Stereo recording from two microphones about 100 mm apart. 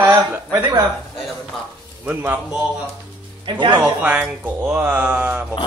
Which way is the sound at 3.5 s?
50° right (ahead or behind).